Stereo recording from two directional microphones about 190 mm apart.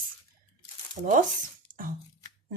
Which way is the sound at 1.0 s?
50° right (ahead or behind).